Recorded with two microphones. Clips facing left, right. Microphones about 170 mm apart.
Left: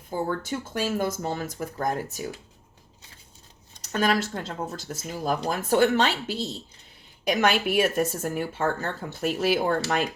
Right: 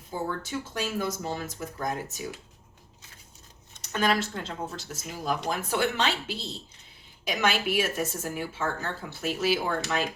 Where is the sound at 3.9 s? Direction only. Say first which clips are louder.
Left 2 dB; 45° left (ahead or behind).